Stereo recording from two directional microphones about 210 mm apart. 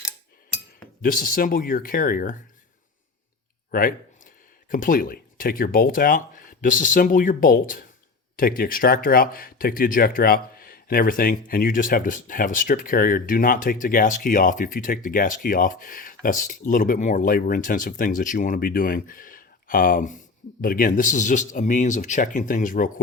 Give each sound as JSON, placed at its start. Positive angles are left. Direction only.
{"t": 1.0, "sound": "speech", "side_deg": 40}
{"t": 3.7, "sound": "a sound", "side_deg": 40}
{"t": 4.7, "sound": "speech", "side_deg": 40}